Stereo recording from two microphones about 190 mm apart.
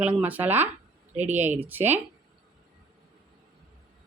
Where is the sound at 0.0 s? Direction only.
10° right (ahead or behind).